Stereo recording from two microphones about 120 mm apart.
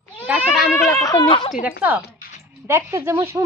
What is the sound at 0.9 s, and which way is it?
Speech, 30° left (ahead or behind).